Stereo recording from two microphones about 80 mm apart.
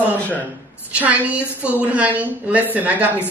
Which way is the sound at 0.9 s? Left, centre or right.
Centre.